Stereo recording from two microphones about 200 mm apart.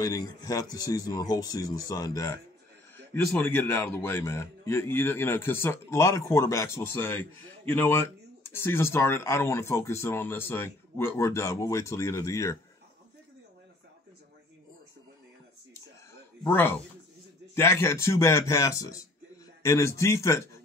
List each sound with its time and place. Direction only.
0.0 s a man's voice: 15° left (ahead or behind)
16.4 s a man's voice: 10° left (ahead or behind)